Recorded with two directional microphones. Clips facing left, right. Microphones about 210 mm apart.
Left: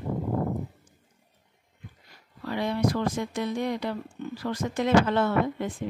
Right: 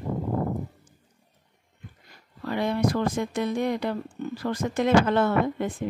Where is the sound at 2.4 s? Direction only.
50° right (ahead or behind).